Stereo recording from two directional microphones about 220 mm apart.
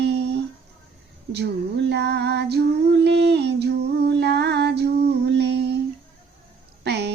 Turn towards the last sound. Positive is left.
turn(degrees=-50)  # may be behind; listen again after turning